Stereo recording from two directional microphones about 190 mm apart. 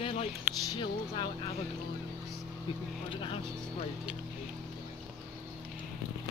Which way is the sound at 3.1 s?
25° left (ahead or behind).